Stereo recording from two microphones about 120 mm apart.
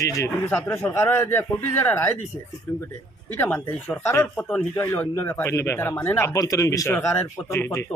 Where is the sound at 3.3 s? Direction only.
15° left (ahead or behind).